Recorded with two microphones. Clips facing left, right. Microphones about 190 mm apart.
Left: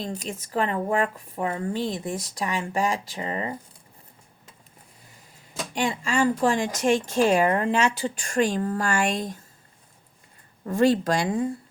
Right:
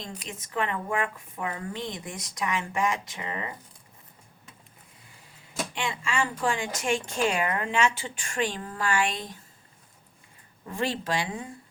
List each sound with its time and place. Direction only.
0.0 s speech: 35° left (ahead or behind)
5.7 s speech: 40° left (ahead or behind)
10.7 s speech: 45° left (ahead or behind)